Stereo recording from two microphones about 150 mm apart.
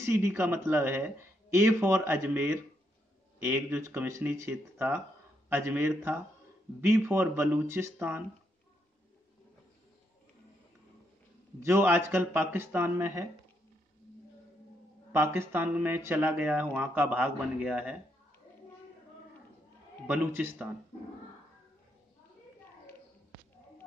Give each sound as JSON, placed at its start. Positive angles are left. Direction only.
{"t": 0.0, "sound": "speech", "side_deg": -15}
{"t": 11.6, "sound": "speech", "side_deg": -15}
{"t": 15.1, "sound": "speech", "side_deg": -15}
{"t": 20.1, "sound": "speech", "side_deg": -10}